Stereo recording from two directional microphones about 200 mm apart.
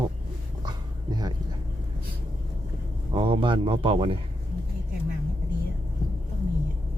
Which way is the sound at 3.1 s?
25° right (ahead or behind).